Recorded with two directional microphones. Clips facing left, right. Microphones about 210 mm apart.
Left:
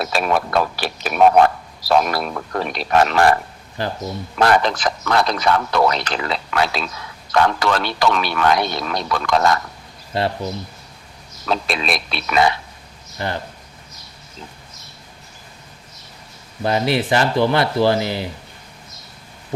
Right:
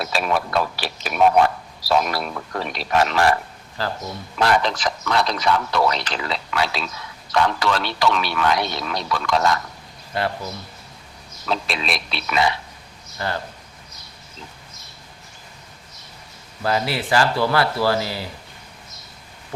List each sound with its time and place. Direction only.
0.0 s a man's voice: 50° left (ahead or behind)
3.8 s speech: 20° left (ahead or behind)
4.4 s a man's voice: 50° left (ahead or behind)
10.2 s speech: 25° left (ahead or behind)
11.4 s a man's voice: 50° left (ahead or behind)
13.1 s speech: 20° left (ahead or behind)
16.6 s speech: 20° left (ahead or behind)